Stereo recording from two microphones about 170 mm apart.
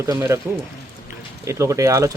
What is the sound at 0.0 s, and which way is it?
Speech, 15° right (ahead or behind).